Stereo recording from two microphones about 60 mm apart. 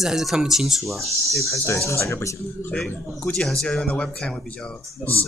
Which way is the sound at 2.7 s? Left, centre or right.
Left.